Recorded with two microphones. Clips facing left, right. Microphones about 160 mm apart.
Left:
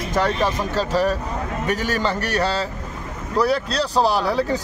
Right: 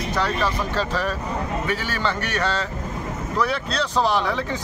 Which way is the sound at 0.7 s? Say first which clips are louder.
Left 4 dB; 40° left (ahead or behind).